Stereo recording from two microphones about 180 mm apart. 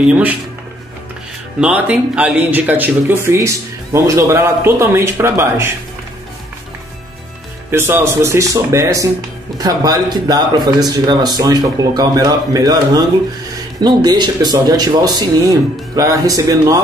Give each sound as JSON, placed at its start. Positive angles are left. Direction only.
{"t": 0.0, "sound": "speech", "side_deg": -10}
{"t": 1.6, "sound": "speech", "side_deg": -5}
{"t": 7.7, "sound": "speech", "side_deg": -15}